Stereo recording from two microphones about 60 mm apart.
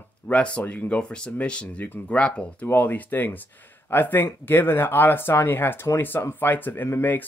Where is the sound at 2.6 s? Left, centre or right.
Left.